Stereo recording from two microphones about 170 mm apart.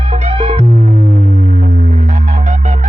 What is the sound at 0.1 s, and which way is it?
Music, 35° right (ahead or behind).